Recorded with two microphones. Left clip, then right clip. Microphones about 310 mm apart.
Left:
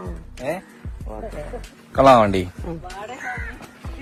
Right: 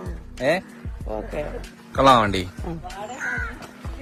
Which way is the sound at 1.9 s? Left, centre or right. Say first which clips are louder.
Left 3 dB; centre.